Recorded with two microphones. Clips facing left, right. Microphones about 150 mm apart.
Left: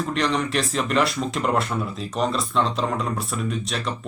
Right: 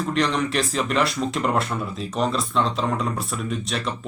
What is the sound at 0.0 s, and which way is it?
Speech, centre (ahead or behind).